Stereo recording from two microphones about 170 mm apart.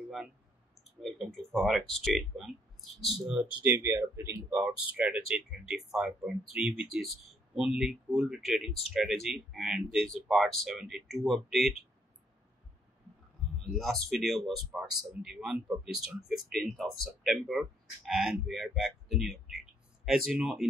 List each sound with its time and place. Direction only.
1.0 s speech: centre (ahead or behind)
3.6 s speech: 15° right (ahead or behind)
4.6 s speech: 10° right (ahead or behind)
13.7 s speech: centre (ahead or behind)